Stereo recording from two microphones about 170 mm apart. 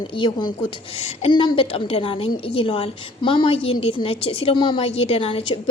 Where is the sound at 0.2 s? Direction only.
25° left (ahead or behind).